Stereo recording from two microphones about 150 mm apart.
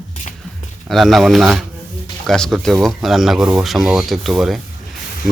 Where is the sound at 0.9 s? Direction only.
Centre (ahead or behind).